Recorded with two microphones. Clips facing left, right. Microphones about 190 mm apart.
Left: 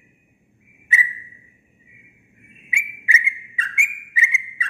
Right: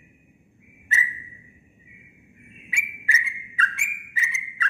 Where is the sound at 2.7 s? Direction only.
15° left (ahead or behind).